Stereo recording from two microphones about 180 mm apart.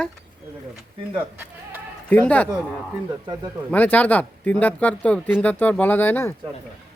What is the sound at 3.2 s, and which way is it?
Speech, 25° right (ahead or behind).